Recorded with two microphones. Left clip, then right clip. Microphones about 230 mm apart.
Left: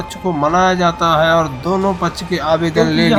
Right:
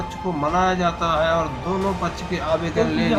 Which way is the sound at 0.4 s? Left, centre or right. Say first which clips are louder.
Left 7 dB; left.